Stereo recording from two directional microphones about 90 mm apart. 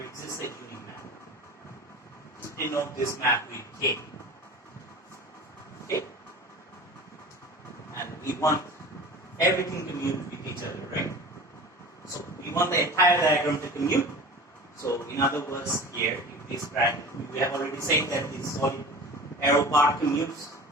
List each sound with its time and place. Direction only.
0.0 s a sound: 30° left (ahead or behind)
2.6 s a man's voice: 30° left (ahead or behind)
7.9 s a sound: 35° left (ahead or behind)
9.4 s a man's voice: 35° left (ahead or behind)
12.4 s a man's voice: 30° left (ahead or behind)
17.4 s a man's voice: 35° left (ahead or behind)